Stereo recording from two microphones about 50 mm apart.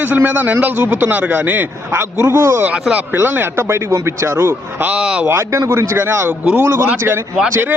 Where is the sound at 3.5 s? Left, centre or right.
Right.